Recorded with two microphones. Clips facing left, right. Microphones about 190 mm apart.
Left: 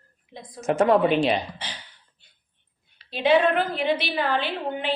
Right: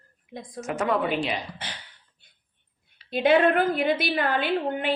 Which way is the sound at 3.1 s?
50° right (ahead or behind).